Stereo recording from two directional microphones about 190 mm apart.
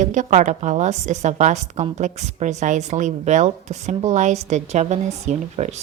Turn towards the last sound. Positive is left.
turn(degrees=-35)  # may be behind; listen again after turning